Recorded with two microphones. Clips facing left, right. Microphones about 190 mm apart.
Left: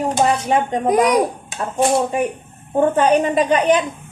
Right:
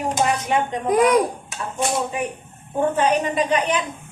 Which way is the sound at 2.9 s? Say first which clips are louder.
Left 4 dB; 30° left (ahead or behind).